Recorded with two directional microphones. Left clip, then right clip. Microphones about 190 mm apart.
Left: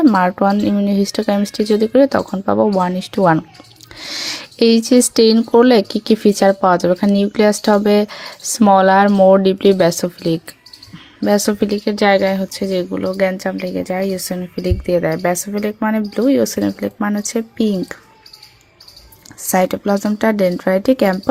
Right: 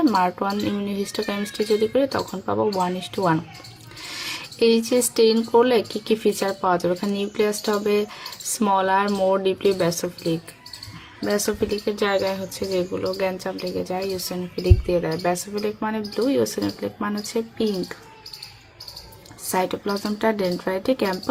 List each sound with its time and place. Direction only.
0.0 s speech: 40° left (ahead or behind)
19.5 s speech: 40° left (ahead or behind)